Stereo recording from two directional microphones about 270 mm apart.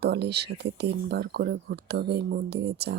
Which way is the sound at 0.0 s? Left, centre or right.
Right.